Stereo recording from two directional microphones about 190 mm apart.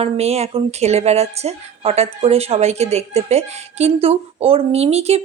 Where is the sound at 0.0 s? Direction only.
35° right (ahead or behind).